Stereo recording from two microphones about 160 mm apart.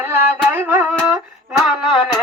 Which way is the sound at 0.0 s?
15° right (ahead or behind).